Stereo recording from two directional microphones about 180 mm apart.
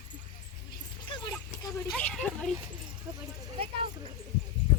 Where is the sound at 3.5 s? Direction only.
30° right (ahead or behind).